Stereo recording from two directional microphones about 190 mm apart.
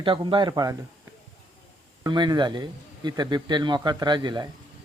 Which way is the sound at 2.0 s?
20° right (ahead or behind).